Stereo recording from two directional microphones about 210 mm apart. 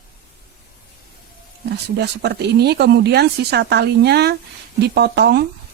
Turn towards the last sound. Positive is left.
turn(degrees=-50)  # may be behind; listen again after turning